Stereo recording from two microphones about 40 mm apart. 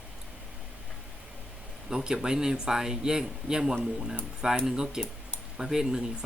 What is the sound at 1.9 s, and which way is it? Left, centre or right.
Speech, centre.